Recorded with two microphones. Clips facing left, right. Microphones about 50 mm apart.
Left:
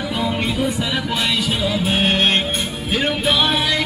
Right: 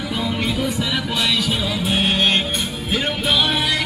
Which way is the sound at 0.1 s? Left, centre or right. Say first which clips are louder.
Even; centre.